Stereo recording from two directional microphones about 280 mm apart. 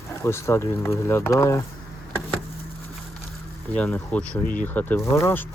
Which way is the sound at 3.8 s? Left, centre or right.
Centre.